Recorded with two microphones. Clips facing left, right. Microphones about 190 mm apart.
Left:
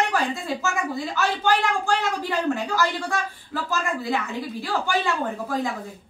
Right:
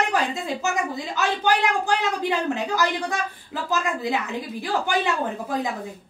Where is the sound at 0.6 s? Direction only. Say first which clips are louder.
Right 1 dB; 15° right (ahead or behind).